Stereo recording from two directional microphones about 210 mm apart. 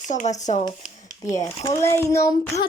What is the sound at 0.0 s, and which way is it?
Speech, 35° left (ahead or behind).